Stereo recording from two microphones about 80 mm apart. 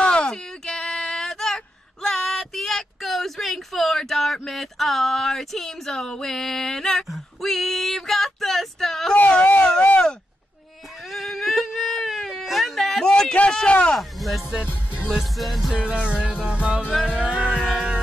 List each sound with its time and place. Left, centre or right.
0.0 s a sound: centre
9.1 s a sound: centre
11.1 s whimper: centre
13.9 s music: centre
15.7 s music: centre
16.9 s music: centre
17.2 s music: centre